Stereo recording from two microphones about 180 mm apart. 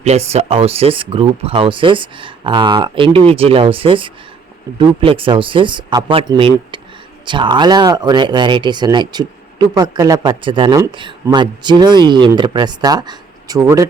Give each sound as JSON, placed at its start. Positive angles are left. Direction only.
{"t": 0.0, "sound": "speech", "side_deg": -35}